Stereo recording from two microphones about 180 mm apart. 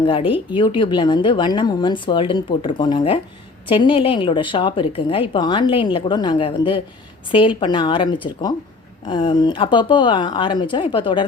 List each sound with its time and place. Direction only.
0.0 s speech: 30° left (ahead or behind)